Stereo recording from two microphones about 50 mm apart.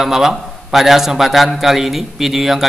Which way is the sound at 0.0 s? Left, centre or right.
Centre.